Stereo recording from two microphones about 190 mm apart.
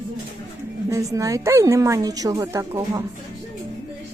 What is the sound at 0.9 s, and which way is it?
Speech, 15° right (ahead or behind).